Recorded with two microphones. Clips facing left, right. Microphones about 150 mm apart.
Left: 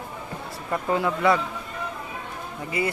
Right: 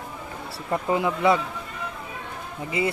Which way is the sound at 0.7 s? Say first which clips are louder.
Right 1 dB; 20° right (ahead or behind).